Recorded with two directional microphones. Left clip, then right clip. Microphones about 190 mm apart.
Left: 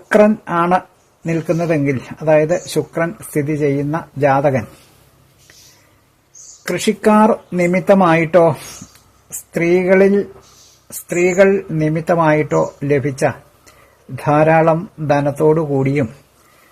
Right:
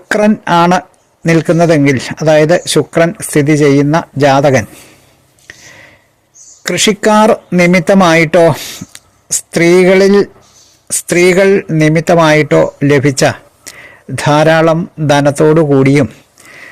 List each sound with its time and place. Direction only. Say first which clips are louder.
0.1 s speech: right 3 dB; 35° right (ahead or behind)
6.6 s speech: right 7 dB; 30° right (ahead or behind)